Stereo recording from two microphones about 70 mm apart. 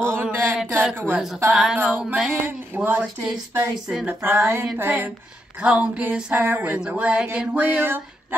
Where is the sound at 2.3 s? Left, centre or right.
Right.